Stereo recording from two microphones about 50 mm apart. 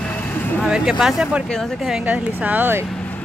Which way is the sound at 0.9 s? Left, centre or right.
Centre.